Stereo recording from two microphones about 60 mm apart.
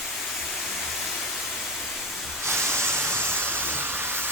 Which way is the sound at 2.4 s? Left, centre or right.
Right.